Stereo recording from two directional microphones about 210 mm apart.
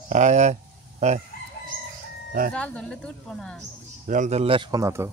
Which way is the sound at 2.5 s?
5° left (ahead or behind).